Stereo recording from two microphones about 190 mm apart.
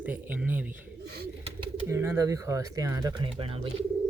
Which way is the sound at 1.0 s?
60° right (ahead or behind).